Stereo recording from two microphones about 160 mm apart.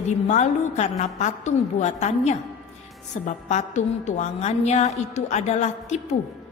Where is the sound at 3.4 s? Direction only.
45° left (ahead or behind).